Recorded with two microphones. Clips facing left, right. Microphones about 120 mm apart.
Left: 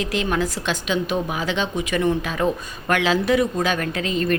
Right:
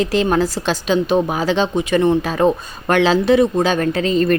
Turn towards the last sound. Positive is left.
turn(degrees=-35)  # may be behind; listen again after turning